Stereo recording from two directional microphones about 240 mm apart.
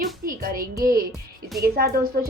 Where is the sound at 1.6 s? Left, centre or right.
Right.